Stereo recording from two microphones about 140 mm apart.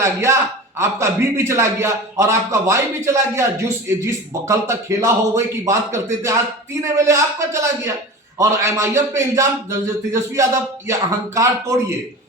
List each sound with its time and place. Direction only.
0.0 s a man's voice: 20° right (ahead or behind)